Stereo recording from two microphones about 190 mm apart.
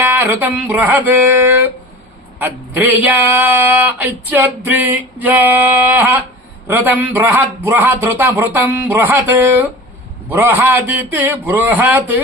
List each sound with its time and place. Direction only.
0.0 s speech: 10° right (ahead or behind)